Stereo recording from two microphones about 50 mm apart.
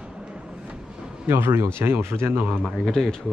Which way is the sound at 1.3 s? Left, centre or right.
Right.